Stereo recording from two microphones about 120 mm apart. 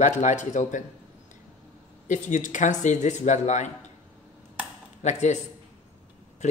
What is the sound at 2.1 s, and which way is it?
Speech, 90° left.